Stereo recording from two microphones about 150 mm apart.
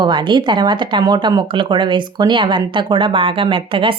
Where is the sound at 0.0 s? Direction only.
30° right (ahead or behind).